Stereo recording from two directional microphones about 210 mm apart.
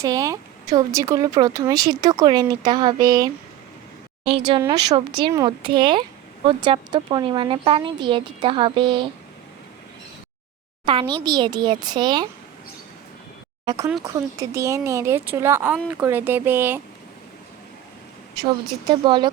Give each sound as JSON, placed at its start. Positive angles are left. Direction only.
{"t": 0.0, "sound": "a woman's voice", "side_deg": -15}
{"t": 10.8, "sound": "speech", "side_deg": -20}
{"t": 13.7, "sound": "speech", "side_deg": -15}
{"t": 18.3, "sound": "speech", "side_deg": -20}